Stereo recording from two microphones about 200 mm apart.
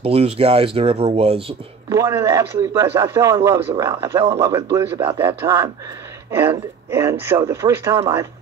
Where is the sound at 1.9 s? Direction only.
15° right (ahead or behind).